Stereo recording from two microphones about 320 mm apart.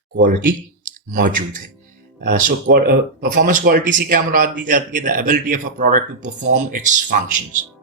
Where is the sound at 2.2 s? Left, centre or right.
Right.